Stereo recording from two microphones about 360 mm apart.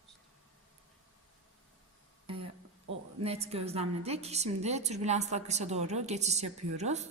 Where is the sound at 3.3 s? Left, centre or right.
Centre.